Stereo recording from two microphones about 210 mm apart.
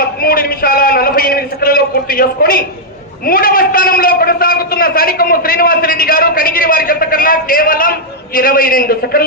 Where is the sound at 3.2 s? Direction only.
45° left (ahead or behind).